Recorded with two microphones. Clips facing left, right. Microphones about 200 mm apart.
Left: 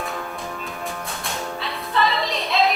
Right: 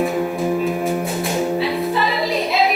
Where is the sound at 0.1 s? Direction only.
15° right (ahead or behind).